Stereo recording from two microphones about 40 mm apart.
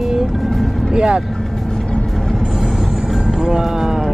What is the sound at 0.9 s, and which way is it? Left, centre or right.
Speech, right.